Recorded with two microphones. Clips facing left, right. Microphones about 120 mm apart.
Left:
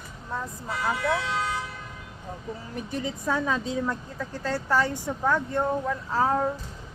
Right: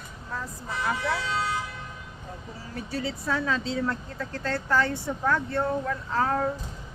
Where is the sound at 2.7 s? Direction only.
20° left (ahead or behind).